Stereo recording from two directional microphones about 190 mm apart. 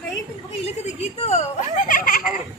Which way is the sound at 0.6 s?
35° left (ahead or behind).